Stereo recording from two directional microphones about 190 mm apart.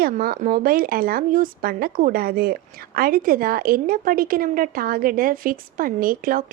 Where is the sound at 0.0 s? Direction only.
50° right (ahead or behind).